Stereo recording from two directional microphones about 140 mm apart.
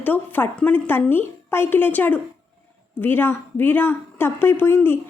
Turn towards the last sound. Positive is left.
turn(degrees=15)  # may be behind; listen again after turning